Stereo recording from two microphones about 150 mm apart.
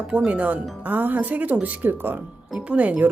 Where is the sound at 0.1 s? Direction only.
10° right (ahead or behind).